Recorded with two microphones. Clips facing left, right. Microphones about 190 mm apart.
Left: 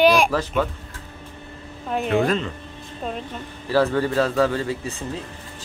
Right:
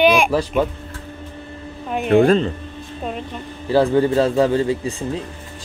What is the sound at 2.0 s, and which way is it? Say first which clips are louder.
Speech: right 8 dB; 35° right (ahead or behind).